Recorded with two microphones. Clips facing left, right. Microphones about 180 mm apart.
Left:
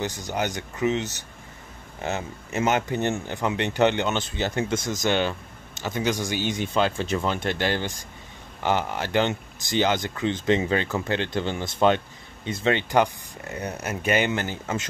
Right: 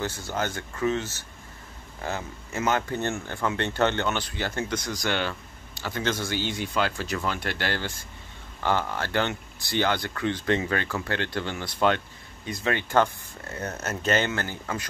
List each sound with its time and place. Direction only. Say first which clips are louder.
0.0 s speech: left 2 dB; 15° left (ahead or behind)